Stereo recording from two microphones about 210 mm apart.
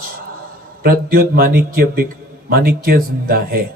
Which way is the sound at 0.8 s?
45° right (ahead or behind).